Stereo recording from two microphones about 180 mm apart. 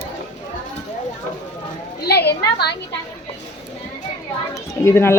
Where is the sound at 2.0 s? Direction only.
65° left (ahead or behind).